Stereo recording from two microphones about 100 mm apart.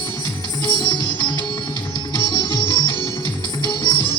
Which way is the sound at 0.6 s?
45° left (ahead or behind).